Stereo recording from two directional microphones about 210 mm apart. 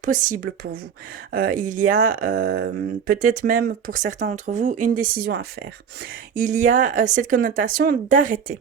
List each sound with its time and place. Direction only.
0.0 s speech: 40° right (ahead or behind)